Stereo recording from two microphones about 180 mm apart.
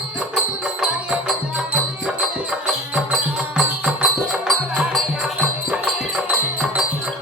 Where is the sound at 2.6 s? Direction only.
Centre (ahead or behind).